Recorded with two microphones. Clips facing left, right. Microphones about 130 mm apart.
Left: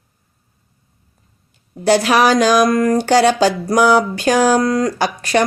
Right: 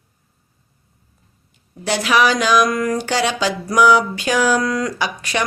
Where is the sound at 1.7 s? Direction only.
40° left (ahead or behind).